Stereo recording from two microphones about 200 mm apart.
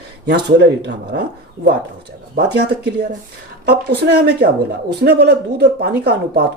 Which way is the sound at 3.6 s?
55° right (ahead or behind).